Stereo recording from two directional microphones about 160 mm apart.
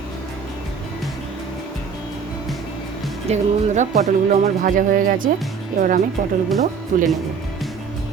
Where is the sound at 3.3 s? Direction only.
50° right (ahead or behind).